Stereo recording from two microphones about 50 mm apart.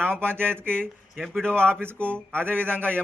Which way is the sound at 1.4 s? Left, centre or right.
Left.